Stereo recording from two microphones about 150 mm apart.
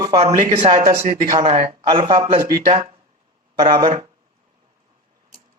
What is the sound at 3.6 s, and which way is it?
Speech, 30° right (ahead or behind).